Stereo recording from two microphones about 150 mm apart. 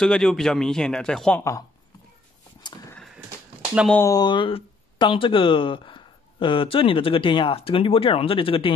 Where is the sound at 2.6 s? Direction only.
30° left (ahead or behind).